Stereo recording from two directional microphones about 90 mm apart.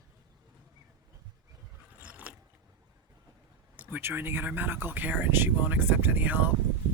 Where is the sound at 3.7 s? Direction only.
20° right (ahead or behind).